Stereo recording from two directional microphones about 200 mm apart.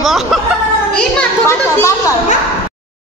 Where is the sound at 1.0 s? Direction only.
15° left (ahead or behind).